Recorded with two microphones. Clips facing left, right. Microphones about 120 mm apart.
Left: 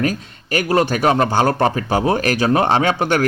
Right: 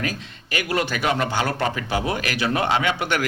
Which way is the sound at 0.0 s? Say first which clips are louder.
Left 8 dB; 40° left (ahead or behind).